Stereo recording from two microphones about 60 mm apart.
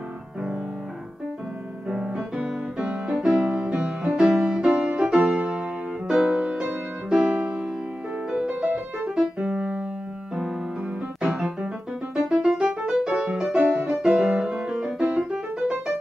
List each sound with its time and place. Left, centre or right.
1.9 s music: centre
8.6 s music: right
9.1 s music: centre
11.1 s music: centre
14.5 s music: right
14.8 s music: centre